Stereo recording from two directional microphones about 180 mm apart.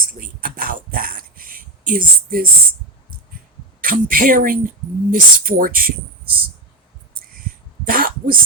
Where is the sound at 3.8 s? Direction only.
50° right (ahead or behind).